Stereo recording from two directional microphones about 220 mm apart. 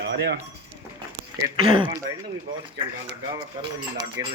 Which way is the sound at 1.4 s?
20° right (ahead or behind).